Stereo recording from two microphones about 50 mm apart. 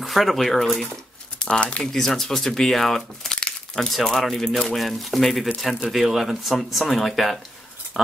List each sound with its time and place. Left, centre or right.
0.0 s speech: centre
1.5 s speech: left
1.8 s speech: centre